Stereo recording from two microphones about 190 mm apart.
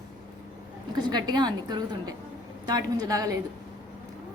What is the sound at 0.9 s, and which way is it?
A woman's voice, 20° right (ahead or behind).